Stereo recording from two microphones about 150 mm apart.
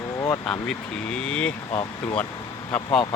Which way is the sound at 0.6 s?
5° left (ahead or behind).